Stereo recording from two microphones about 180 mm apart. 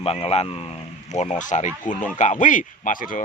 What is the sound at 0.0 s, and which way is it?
Speech, 35° left (ahead or behind).